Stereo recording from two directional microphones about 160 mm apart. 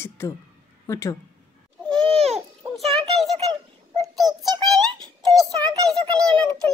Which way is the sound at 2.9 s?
Centre (ahead or behind).